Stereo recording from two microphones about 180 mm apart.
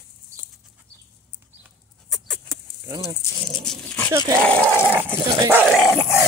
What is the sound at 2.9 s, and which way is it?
Speech, 20° right (ahead or behind).